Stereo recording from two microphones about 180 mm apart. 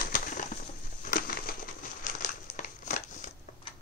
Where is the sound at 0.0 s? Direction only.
50° left (ahead or behind).